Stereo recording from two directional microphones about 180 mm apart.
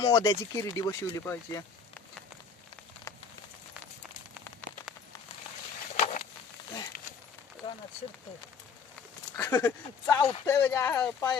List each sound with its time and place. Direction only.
0.0 s speech: 25° left (ahead or behind)
6.0 s a sound: 45° left (ahead or behind)
9.4 s speech: 10° left (ahead or behind)